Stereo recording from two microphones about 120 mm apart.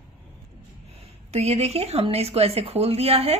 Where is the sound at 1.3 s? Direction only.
65° right (ahead or behind).